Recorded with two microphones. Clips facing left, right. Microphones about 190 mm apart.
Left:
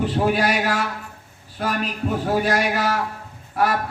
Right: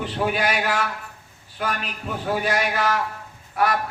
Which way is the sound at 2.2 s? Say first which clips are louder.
Left 2 dB; 40° left (ahead or behind).